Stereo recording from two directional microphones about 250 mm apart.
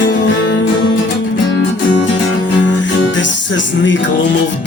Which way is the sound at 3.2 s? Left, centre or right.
Left.